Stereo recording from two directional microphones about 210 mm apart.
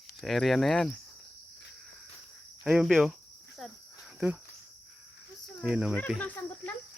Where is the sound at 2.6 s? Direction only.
5° right (ahead or behind).